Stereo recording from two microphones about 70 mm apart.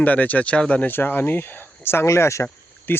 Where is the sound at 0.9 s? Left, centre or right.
Left.